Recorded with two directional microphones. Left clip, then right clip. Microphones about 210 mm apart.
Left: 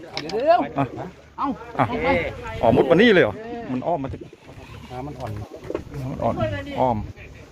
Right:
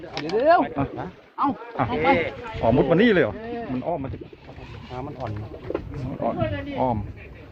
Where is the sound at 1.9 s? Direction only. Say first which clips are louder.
Right 4 dB; 20° right (ahead or behind).